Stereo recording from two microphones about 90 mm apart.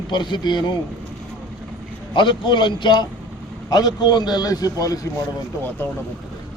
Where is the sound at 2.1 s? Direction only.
60° left (ahead or behind); by 5.0 s 40° left (ahead or behind).